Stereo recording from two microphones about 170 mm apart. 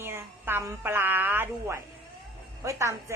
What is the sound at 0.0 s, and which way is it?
A woman's voice, 15° right (ahead or behind).